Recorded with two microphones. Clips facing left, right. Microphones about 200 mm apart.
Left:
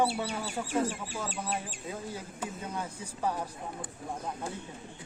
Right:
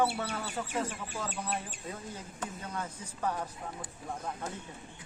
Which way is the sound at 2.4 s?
10° left (ahead or behind).